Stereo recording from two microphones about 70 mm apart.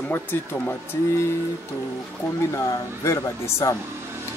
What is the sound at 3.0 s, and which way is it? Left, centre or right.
Speech, left.